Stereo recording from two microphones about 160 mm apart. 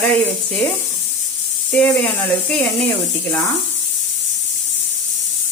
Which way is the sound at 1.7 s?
10° left (ahead or behind).